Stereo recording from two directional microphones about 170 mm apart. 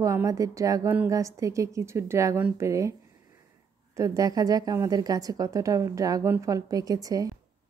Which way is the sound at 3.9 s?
20° right (ahead or behind).